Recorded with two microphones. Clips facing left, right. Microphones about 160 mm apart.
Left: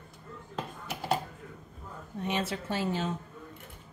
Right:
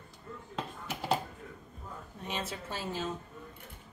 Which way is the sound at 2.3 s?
70° left (ahead or behind).